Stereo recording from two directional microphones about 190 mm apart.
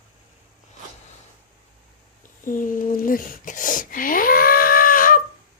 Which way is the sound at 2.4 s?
45° left (ahead or behind).